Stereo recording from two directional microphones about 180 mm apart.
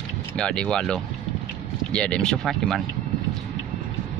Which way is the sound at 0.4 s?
5° left (ahead or behind).